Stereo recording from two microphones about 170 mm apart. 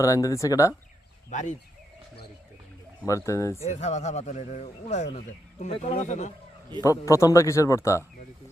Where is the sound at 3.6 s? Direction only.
40° left (ahead or behind).